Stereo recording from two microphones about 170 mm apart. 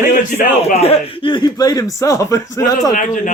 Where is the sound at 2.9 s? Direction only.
45° left (ahead or behind).